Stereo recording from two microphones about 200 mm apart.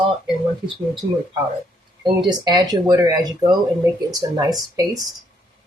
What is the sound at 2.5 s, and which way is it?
Speech, 20° right (ahead or behind).